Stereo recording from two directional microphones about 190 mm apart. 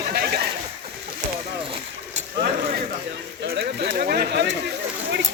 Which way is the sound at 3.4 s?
60° right (ahead or behind).